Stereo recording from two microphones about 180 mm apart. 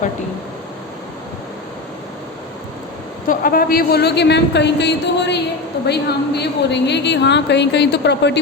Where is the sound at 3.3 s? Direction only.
50° left (ahead or behind).